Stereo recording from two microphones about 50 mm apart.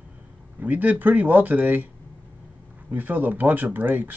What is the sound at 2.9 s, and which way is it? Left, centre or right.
Speech, right.